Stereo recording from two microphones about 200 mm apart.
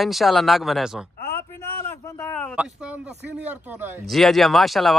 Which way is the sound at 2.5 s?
5° right (ahead or behind).